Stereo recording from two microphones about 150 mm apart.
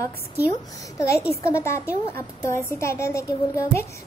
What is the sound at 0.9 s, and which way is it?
A child's voice, 20° left (ahead or behind).